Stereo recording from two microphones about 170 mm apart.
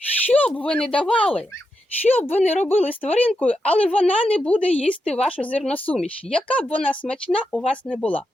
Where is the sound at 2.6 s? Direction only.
10° left (ahead or behind).